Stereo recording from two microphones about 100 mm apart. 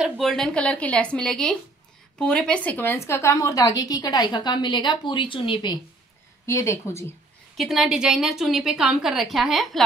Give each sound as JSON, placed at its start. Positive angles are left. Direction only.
{"t": 0.2, "sound": "a woman's voice", "side_deg": 5}
{"t": 6.4, "sound": "speech", "side_deg": 30}
{"t": 7.5, "sound": "a woman's voice", "side_deg": 0}